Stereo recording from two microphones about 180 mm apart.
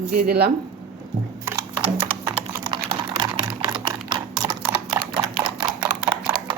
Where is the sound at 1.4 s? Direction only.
10° right (ahead or behind).